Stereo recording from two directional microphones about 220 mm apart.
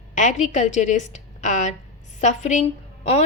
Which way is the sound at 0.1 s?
35° left (ahead or behind).